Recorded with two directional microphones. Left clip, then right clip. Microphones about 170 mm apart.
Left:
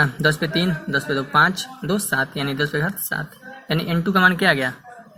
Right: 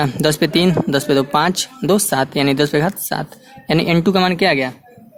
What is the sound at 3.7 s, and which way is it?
Speech, 40° right (ahead or behind).